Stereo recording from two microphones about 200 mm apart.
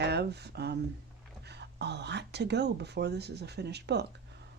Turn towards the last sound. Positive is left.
turn(degrees=-55)  # may be behind; listen again after turning